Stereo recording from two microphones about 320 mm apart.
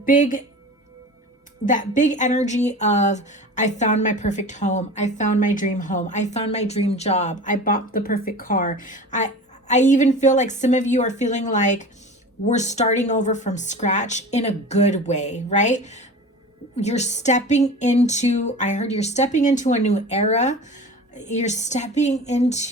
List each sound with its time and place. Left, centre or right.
0.0 s speech: left
1.6 s speech: left